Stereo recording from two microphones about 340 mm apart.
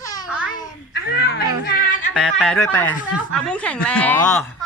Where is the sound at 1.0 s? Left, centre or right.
Left.